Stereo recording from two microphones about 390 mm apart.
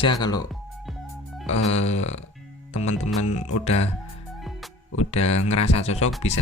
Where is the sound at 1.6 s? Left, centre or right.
Left.